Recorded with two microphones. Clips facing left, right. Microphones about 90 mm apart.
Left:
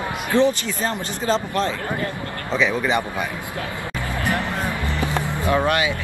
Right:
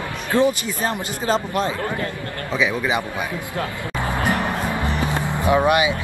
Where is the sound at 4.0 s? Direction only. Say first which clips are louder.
Right 3 dB; 20° right (ahead or behind).